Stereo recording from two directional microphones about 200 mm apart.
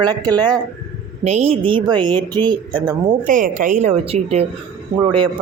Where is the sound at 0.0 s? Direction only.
20° right (ahead or behind).